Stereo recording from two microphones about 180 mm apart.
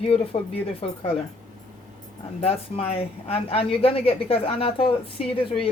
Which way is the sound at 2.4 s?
35° left (ahead or behind).